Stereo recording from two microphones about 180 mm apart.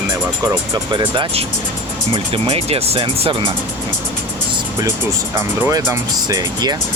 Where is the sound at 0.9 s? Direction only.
25° right (ahead or behind).